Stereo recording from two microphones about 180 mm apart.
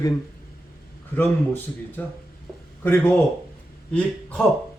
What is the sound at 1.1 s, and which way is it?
Speech, 10° left (ahead or behind).